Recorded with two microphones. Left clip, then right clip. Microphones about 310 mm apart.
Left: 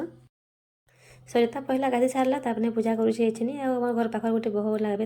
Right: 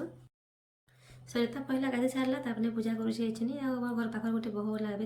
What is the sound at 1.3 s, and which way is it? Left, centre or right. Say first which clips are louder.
Speech: left 9 dB; centre.